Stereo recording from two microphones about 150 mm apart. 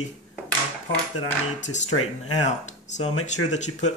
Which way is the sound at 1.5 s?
50° left (ahead or behind).